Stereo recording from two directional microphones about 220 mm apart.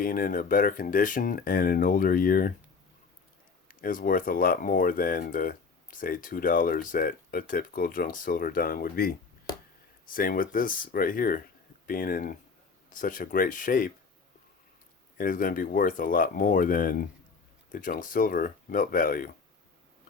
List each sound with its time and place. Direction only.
0.0 s speech: 40° left (ahead or behind)
3.7 s speech: 40° left (ahead or behind)
15.2 s speech: 40° left (ahead or behind)